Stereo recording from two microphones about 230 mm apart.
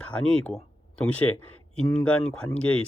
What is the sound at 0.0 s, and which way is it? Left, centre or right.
Speech, centre.